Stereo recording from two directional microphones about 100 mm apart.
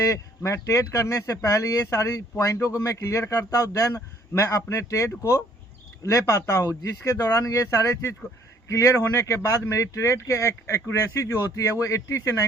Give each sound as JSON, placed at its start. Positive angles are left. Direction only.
{"t": 0.0, "sound": "a man's voice", "side_deg": 30}